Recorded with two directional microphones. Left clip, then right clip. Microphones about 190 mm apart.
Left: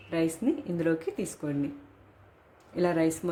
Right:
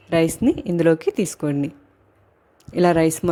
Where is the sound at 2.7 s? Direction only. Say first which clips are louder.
Right 10 dB; 50° right (ahead or behind).